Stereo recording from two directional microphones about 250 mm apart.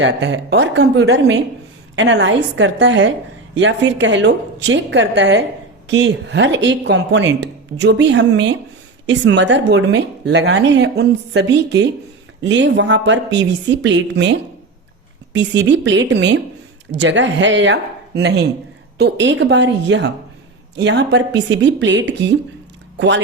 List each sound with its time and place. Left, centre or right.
0.0 s a woman's voice: right